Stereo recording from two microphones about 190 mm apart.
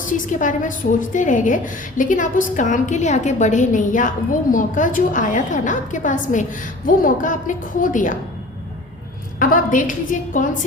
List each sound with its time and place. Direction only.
0.0 s a woman's voice: 45° left (ahead or behind)
9.4 s a woman's voice: 45° left (ahead or behind)